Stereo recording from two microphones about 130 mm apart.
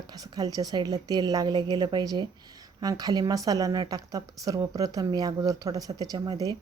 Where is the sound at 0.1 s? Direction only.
30° right (ahead or behind).